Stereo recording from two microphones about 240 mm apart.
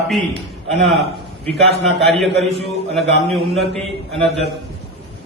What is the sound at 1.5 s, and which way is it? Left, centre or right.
Speech, centre.